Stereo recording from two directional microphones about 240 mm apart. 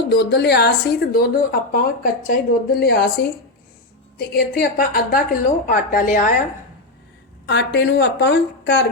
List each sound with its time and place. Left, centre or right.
0.1 s a woman's voice: left
7.4 s speech: left